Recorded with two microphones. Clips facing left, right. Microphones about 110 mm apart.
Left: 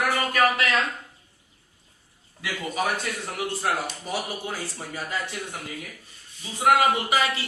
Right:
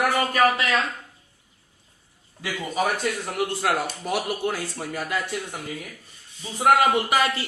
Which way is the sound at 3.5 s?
70° right (ahead or behind).